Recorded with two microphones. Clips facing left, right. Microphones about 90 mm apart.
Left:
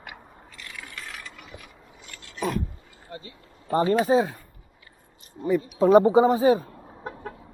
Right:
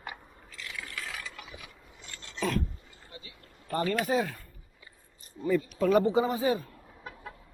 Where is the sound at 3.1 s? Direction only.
35° left (ahead or behind).